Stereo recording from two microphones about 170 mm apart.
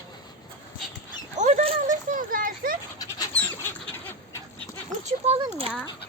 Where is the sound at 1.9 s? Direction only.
50° right (ahead or behind).